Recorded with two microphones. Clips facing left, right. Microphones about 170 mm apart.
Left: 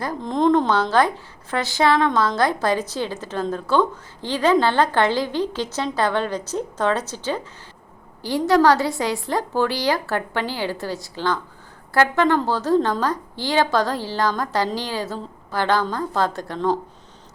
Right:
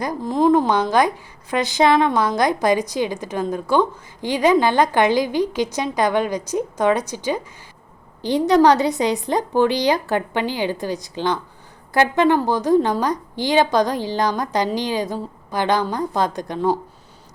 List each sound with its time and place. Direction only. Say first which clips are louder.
0.2 s a woman's voice: right 2 dB; 5° right (ahead or behind)